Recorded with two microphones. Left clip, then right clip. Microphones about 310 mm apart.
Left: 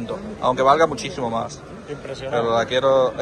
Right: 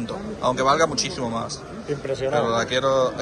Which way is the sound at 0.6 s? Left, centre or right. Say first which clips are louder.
Left 4 dB; centre.